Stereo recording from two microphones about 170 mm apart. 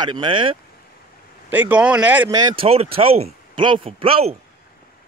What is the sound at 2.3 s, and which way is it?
Speech, 30° right (ahead or behind).